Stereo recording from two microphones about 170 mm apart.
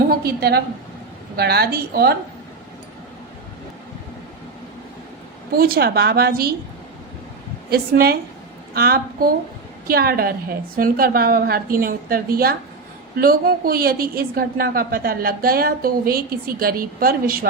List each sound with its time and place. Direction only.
0.1 s a woman's voice: 65° right (ahead or behind)
5.5 s a woman's voice: 60° right (ahead or behind)
7.7 s a woman's voice: 60° right (ahead or behind)